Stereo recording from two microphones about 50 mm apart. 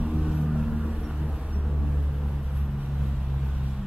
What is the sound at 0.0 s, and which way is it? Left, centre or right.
Vehicle, right.